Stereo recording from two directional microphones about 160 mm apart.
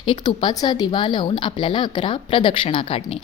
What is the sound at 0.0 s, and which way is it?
Speech, 30° left (ahead or behind).